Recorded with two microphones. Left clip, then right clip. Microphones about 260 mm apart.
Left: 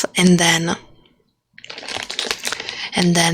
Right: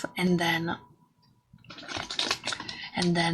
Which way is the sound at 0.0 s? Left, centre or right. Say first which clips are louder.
Left 12 dB; left.